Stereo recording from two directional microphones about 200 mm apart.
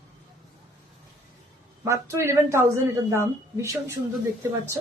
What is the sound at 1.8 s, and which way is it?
A woman's voice, 15° right (ahead or behind).